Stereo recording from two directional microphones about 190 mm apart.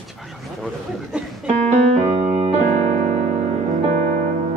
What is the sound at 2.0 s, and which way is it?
Keyboard, 30° right (ahead or behind).